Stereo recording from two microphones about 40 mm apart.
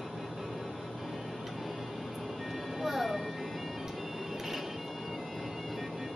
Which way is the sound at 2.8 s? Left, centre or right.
Centre.